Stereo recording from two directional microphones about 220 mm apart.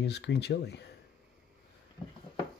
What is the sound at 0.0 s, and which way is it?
Speech, 50° left (ahead or behind).